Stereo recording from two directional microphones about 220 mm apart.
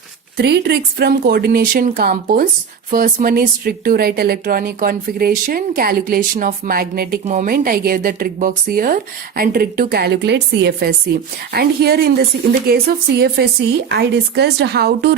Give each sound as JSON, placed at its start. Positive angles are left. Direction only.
{"t": 0.3, "sound": "speech", "side_deg": -50}